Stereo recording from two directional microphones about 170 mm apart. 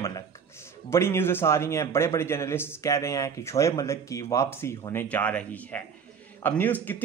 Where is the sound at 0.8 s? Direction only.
15° left (ahead or behind).